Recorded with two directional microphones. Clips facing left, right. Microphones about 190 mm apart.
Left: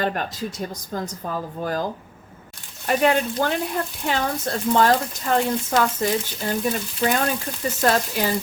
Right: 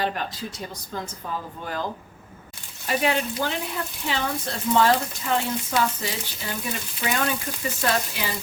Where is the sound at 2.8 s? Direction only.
50° left (ahead or behind).